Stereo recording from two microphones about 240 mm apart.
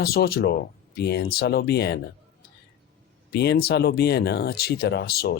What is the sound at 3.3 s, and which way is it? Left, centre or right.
Speech, left.